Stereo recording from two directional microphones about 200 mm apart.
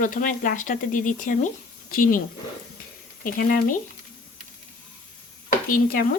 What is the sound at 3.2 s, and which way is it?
Speech, 45° left (ahead or behind).